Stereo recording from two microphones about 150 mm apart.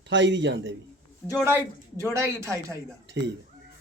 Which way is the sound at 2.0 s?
20° right (ahead or behind).